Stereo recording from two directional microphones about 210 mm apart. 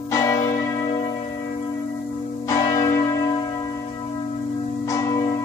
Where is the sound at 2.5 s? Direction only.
15° left (ahead or behind).